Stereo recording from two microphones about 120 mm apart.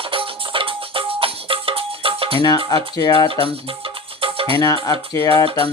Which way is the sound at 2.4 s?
35° left (ahead or behind).